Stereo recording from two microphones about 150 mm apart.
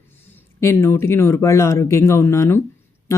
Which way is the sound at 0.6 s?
15° left (ahead or behind).